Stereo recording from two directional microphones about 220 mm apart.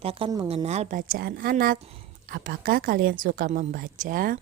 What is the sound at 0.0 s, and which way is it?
A woman's voice, 25° right (ahead or behind).